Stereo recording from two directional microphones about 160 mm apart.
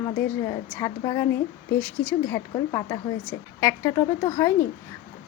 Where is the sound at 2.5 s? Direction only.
25° left (ahead or behind).